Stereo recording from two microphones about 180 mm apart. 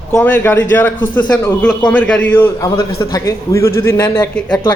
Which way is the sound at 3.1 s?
15° left (ahead or behind).